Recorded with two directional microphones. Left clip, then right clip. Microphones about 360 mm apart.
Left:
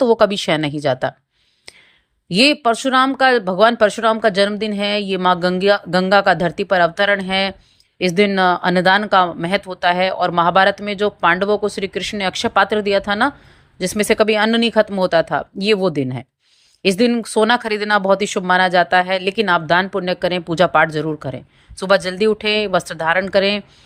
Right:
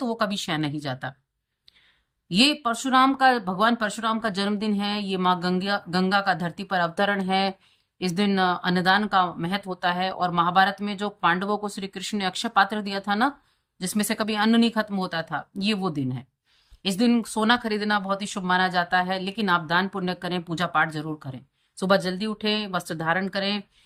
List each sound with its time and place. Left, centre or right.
0.0 s speech: centre
2.3 s speech: centre